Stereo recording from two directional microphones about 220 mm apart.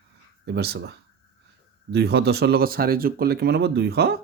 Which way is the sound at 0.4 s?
45° right (ahead or behind).